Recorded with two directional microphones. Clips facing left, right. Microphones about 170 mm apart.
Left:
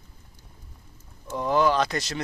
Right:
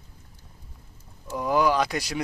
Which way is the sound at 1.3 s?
10° right (ahead or behind).